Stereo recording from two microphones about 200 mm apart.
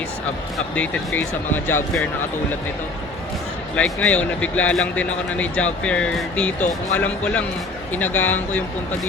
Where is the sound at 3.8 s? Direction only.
5° left (ahead or behind).